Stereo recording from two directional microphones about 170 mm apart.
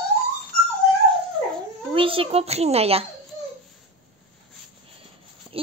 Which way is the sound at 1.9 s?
30° right (ahead or behind).